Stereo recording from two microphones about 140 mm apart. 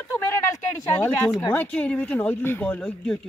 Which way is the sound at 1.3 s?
10° left (ahead or behind).